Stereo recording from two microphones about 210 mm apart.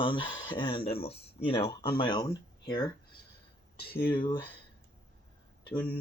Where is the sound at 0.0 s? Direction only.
25° left (ahead or behind).